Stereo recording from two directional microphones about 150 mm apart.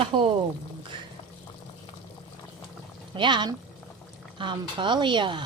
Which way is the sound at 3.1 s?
30° right (ahead or behind).